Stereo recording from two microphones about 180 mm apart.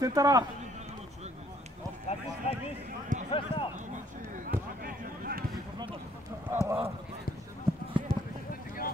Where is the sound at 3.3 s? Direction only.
30° left (ahead or behind).